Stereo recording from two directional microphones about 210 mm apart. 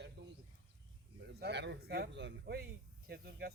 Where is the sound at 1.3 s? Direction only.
50° right (ahead or behind).